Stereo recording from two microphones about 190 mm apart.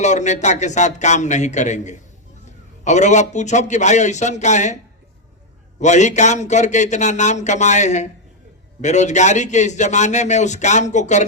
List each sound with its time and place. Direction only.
0.0 s a man's voice: 40° left (ahead or behind)
5.8 s a man's voice: 40° left (ahead or behind)